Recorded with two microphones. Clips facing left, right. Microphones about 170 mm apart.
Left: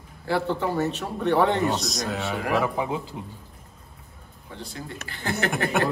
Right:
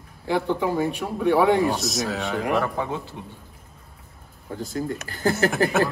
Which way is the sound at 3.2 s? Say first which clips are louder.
Left 1 dB; 20° left (ahead or behind).